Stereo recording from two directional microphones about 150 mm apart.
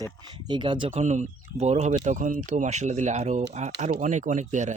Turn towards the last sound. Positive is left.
turn(degrees=-55)  # may be behind; listen again after turning